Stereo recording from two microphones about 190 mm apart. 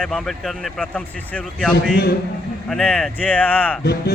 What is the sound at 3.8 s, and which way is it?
Speech, 55° left (ahead or behind).